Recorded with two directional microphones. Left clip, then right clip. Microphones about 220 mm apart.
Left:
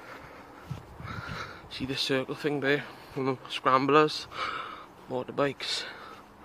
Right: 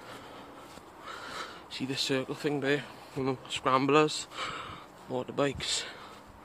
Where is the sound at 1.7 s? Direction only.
5° left (ahead or behind).